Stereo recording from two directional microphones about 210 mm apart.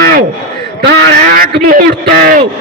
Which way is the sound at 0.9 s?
45° right (ahead or behind).